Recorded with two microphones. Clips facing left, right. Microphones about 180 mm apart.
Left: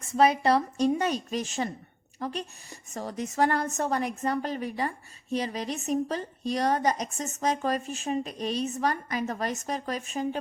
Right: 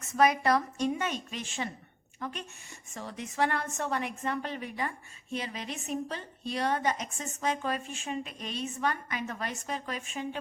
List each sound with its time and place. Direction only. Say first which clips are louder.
0.0 s a woman's voice: left 3 dB; 30° left (ahead or behind)